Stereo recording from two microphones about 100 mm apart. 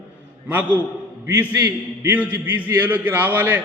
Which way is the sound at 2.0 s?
15° right (ahead or behind).